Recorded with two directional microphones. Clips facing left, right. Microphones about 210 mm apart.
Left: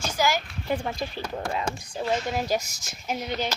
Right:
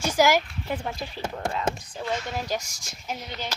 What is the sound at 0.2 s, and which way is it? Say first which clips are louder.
Speech: right 5 dB; 90° right.